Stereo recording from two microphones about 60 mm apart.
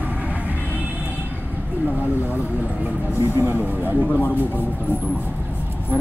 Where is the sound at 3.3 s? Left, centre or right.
Right.